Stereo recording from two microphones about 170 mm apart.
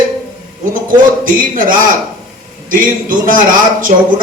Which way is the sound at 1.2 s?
55° right (ahead or behind).